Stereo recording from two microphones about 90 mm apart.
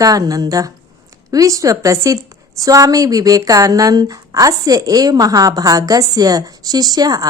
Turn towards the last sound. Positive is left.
turn(degrees=-45)  # may be behind; listen again after turning